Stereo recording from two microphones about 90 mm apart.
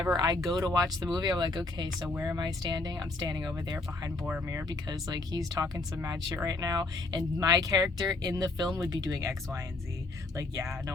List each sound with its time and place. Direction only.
0.2 s speech: 45° right (ahead or behind)